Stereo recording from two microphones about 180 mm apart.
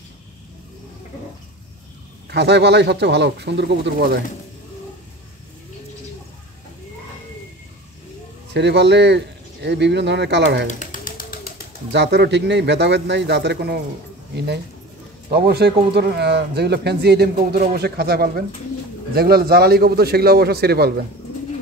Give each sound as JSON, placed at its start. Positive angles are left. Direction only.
{"t": 2.2, "sound": "speech", "side_deg": -70}
{"t": 8.5, "sound": "speech", "side_deg": -70}
{"t": 10.7, "sound": "pigeon", "side_deg": 45}
{"t": 11.9, "sound": "speech", "side_deg": -70}
{"t": 15.3, "sound": "a man's voice", "side_deg": -65}